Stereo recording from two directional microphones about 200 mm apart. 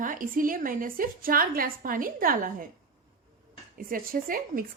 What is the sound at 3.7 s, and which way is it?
Speech, 45° right (ahead or behind).